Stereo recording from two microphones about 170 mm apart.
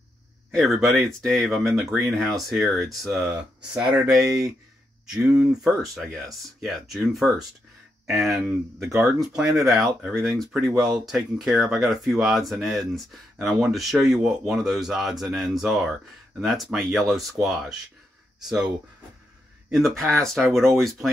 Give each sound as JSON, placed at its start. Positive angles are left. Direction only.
{"t": 0.6, "sound": "speech", "side_deg": 0}
{"t": 8.7, "sound": "speech", "side_deg": 0}
{"t": 19.7, "sound": "speech", "side_deg": 0}